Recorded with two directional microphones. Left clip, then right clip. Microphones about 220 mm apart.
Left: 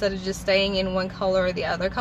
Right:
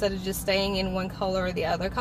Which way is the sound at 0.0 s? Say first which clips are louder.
Left 2 dB; 5° left (ahead or behind).